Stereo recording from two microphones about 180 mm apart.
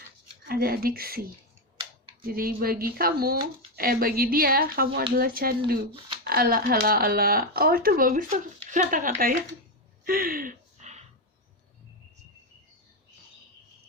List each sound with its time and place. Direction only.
0.4 s speech: 55° right (ahead or behind)
8.5 s speech: 40° right (ahead or behind)
10.0 s a sound: 55° right (ahead or behind)